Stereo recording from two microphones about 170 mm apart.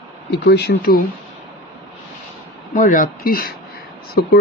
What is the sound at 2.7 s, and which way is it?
Speech, 55° left (ahead or behind).